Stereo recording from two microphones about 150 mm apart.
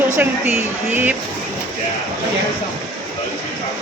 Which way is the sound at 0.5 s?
15° right (ahead or behind).